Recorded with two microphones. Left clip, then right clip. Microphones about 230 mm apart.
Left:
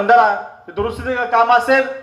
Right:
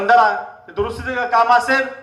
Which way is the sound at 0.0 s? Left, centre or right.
Right.